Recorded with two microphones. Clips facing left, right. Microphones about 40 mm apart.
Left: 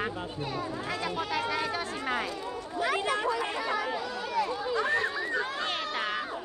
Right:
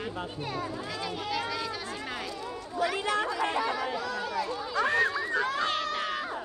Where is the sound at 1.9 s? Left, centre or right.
Left.